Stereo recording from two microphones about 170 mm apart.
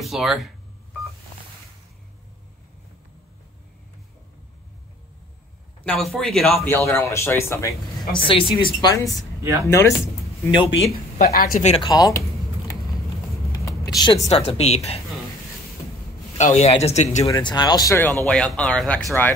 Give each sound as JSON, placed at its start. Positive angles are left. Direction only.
{"t": 0.0, "sound": "speech", "side_deg": 0}
{"t": 5.9, "sound": "speech", "side_deg": 0}
{"t": 8.2, "sound": "a woman's voice", "side_deg": 30}
{"t": 9.4, "sound": "speech", "side_deg": -15}
{"t": 9.7, "sound": "speech", "side_deg": 15}
{"t": 11.1, "sound": "speech", "side_deg": 55}
{"t": 11.7, "sound": "a woman's voice", "side_deg": 25}
{"t": 13.5, "sound": "vehicle", "side_deg": 20}
{"t": 14.2, "sound": "a woman's voice", "side_deg": 35}
{"t": 16.3, "sound": "speech", "side_deg": 45}
{"t": 17.3, "sound": "a woman's voice", "side_deg": 25}
{"t": 18.2, "sound": "speech", "side_deg": 5}